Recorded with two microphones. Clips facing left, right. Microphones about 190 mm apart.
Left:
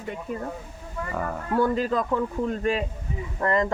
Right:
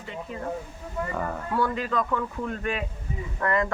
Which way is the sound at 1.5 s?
40° left (ahead or behind).